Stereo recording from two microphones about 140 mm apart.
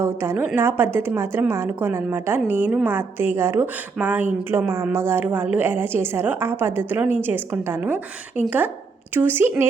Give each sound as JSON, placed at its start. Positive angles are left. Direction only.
{"t": 0.0, "sound": "a woman's voice", "side_deg": -15}